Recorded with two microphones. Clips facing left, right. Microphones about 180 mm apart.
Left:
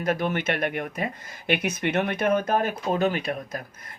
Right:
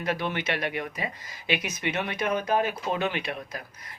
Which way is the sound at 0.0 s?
45° left (ahead or behind).